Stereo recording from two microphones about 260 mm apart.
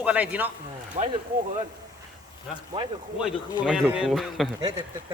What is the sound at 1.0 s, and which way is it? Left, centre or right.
Speech, right.